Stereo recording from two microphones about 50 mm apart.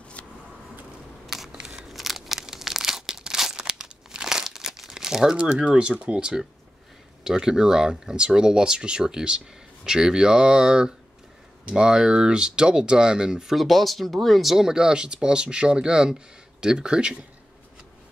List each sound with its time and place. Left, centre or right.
1.2 s biting: centre
1.5 s crunch: centre
1.9 s crumpling: centre
5.4 s speech: right
13.6 s speech: centre